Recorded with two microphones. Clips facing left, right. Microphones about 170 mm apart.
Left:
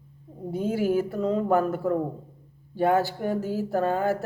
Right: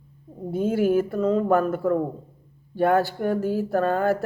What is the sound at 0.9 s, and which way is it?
Speech, 15° left (ahead or behind).